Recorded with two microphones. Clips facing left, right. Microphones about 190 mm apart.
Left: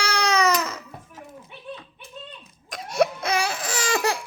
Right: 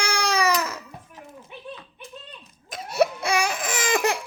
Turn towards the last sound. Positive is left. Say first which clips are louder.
# right 1 dB
turn(degrees=-20)  # may be behind; listen again after turning